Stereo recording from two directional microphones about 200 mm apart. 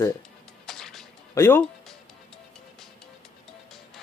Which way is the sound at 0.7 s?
Centre (ahead or behind).